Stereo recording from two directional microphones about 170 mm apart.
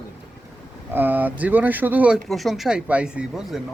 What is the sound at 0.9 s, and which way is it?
Speech, 10° right (ahead or behind).